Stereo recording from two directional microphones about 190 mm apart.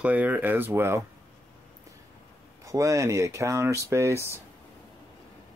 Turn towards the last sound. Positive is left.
turn(degrees=15)  # may be behind; listen again after turning